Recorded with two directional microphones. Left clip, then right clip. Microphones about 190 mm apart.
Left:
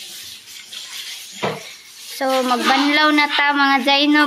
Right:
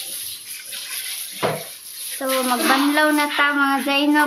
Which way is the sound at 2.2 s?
15° left (ahead or behind).